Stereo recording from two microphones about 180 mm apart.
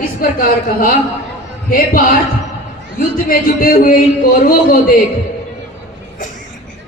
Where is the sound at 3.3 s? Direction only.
55° left (ahead or behind).